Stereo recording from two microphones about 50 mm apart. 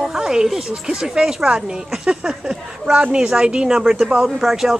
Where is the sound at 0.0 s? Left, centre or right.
Centre.